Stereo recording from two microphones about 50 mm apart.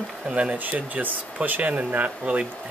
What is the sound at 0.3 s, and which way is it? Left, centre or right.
Speech, right.